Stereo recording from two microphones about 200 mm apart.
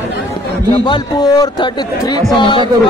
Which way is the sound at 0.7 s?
25° left (ahead or behind).